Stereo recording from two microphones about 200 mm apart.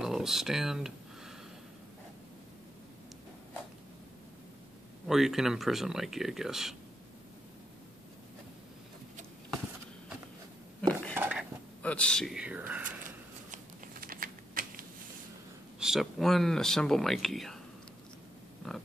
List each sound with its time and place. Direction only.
0.0 s a sound: centre (ahead or behind)
5.0 s speech: centre (ahead or behind)
10.8 s dishes: 5° left (ahead or behind)
11.1 s dishes: 5° right (ahead or behind)
11.8 s speech: 5° left (ahead or behind)
12.8 s a sound: 40° right (ahead or behind)
14.0 s typing: 45° right (ahead or behind)
15.8 s speech: centre (ahead or behind)